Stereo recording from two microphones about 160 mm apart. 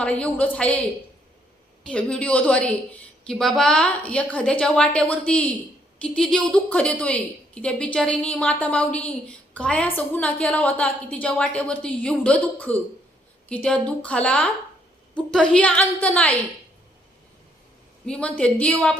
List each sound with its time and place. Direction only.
0.0 s a woman's voice: 10° left (ahead or behind)
1.8 s a woman's voice: 5° left (ahead or behind)
18.0 s a woman's voice: 5° left (ahead or behind)